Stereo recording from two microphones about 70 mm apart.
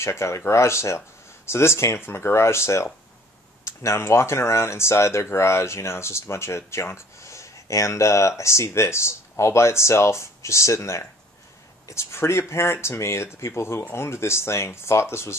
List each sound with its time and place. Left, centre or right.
0.0 s speech: left